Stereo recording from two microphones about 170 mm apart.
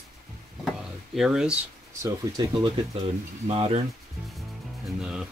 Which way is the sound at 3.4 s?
40° right (ahead or behind).